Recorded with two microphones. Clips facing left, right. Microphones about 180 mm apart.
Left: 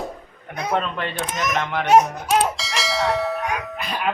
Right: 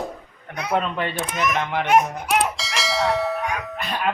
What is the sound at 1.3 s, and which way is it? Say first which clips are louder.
Speech: right 2 dB; 40° left (ahead or behind).